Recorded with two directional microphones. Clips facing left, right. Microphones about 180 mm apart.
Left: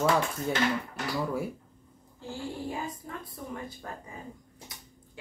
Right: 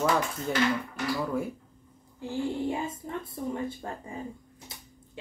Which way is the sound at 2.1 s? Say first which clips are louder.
Right 6 dB; 20° right (ahead or behind).